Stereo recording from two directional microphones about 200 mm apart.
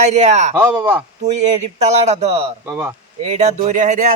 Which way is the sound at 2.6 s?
10° right (ahead or behind).